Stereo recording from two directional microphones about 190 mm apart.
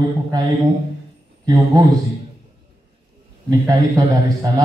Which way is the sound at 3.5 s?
20° right (ahead or behind).